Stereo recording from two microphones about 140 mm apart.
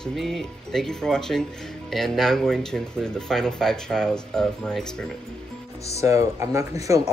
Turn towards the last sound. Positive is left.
turn(degrees=-20)  # may be behind; listen again after turning